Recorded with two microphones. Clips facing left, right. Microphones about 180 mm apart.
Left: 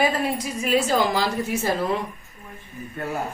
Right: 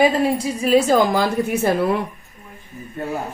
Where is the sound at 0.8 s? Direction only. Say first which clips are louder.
Right 5 dB; 45° right (ahead or behind).